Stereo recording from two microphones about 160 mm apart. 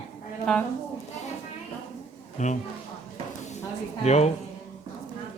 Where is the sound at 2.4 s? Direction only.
50° left (ahead or behind).